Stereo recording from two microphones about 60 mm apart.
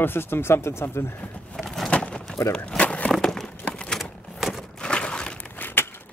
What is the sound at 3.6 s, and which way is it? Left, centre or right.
Typewriter, centre.